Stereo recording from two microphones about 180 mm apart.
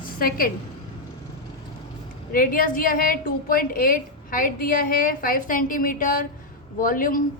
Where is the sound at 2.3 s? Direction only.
50° left (ahead or behind).